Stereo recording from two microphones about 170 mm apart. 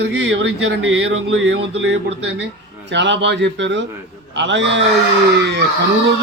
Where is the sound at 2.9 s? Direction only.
90° right.